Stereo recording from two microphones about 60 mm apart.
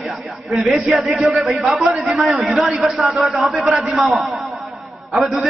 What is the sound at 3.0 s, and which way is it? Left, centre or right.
Speech, centre.